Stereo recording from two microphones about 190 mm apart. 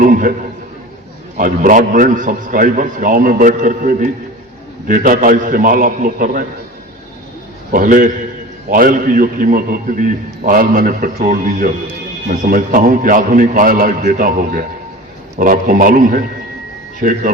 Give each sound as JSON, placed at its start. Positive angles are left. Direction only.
{"t": 0.0, "sound": "a man's voice", "side_deg": -45}
{"t": 1.4, "sound": "a man's voice", "side_deg": -45}
{"t": 7.7, "sound": "a man's voice", "side_deg": -45}